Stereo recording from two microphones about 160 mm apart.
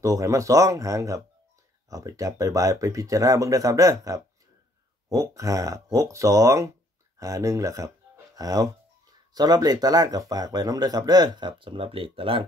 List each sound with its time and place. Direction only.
0.0 s speech: 20° right (ahead or behind)